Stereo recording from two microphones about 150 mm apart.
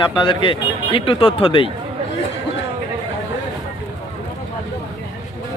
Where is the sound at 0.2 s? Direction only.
35° left (ahead or behind).